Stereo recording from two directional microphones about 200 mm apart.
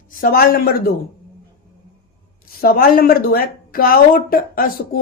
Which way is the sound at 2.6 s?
50° left (ahead or behind).